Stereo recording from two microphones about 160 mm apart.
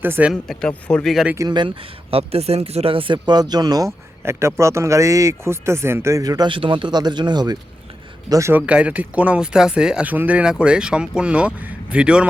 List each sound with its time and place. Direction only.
0.0 s speech: 10° right (ahead or behind)
0.4 s speech: 5° left (ahead or behind)
1.4 s speech: 25° right (ahead or behind); by 12.3 s 5° right (ahead or behind)